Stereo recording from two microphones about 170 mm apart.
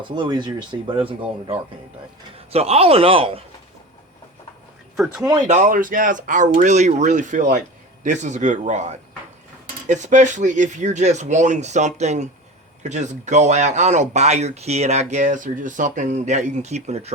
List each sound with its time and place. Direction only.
0.2 s speech: 25° right (ahead or behind)
5.1 s speech: 20° right (ahead or behind)
5.5 s speech: 50° right (ahead or behind)